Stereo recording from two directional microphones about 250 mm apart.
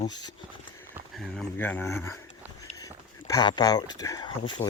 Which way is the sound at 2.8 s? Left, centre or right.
Centre.